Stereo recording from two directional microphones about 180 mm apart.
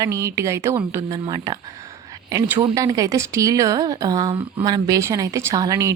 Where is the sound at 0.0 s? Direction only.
20° right (ahead or behind).